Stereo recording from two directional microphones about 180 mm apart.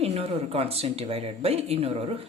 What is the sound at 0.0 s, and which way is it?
Speech, 35° right (ahead or behind).